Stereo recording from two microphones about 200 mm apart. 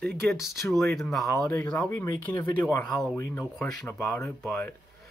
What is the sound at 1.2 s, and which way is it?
Speech, 15° left (ahead or behind).